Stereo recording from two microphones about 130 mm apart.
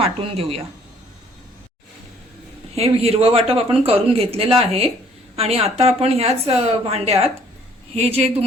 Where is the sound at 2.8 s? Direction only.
50° right (ahead or behind).